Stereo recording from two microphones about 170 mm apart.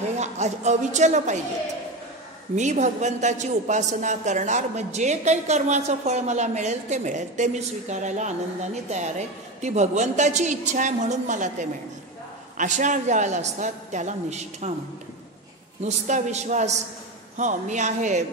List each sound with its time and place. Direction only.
0.2 s a woman's voice: 40° right (ahead or behind)
2.5 s a woman's voice: 45° right (ahead or behind)
12.5 s a woman's voice: 45° right (ahead or behind)
15.8 s a woman's voice: 45° right (ahead or behind)